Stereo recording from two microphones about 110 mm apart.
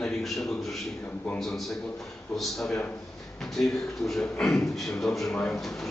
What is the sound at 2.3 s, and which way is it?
Speech, centre (ahead or behind).